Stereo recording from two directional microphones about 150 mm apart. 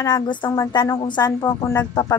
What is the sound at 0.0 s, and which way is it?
A woman's voice, 30° left (ahead or behind).